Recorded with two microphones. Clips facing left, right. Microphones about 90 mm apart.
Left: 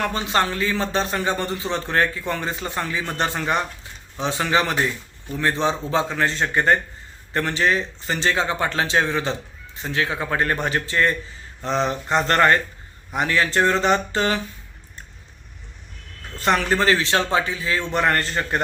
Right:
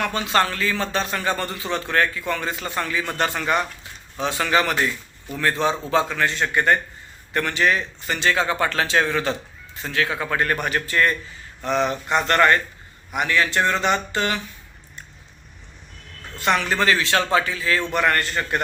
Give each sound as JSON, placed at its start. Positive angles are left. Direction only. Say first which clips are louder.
{"t": 0.0, "sound": "a man's voice", "louder": "right 1 dB", "side_deg": 25}
{"t": 16.4, "sound": "a man's voice", "louder": "left 1 dB", "side_deg": 35}